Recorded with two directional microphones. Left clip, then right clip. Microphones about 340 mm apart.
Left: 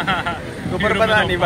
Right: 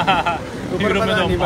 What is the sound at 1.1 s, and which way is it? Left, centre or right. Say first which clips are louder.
Speech: left 2 dB; centre.